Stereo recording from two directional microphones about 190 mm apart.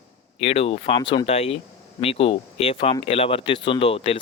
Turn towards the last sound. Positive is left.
turn(degrees=30)  # may be behind; listen again after turning